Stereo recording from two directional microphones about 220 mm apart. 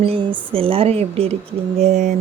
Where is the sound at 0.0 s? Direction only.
25° right (ahead or behind).